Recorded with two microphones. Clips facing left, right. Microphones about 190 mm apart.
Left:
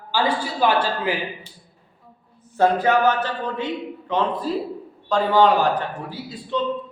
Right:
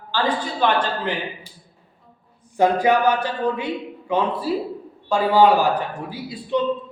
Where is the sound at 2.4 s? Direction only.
15° right (ahead or behind).